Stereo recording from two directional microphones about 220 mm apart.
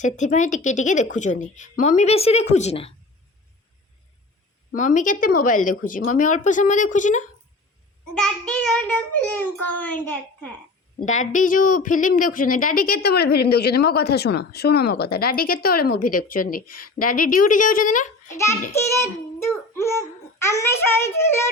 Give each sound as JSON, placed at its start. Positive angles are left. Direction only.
{"t": 0.0, "sound": "speech", "side_deg": 35}
{"t": 4.7, "sound": "speech", "side_deg": 35}
{"t": 8.1, "sound": "a child's voice", "side_deg": 5}
{"t": 11.0, "sound": "speech", "side_deg": 35}
{"t": 18.7, "sound": "a child's voice", "side_deg": 10}